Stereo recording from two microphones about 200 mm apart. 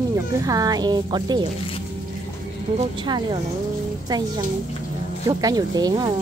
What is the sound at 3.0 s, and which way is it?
Speech, 20° right (ahead or behind).